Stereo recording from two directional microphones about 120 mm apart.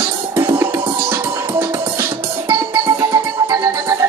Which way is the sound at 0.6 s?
20° right (ahead or behind).